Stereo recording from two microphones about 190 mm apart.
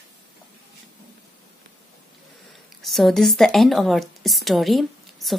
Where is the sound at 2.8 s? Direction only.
Centre (ahead or behind).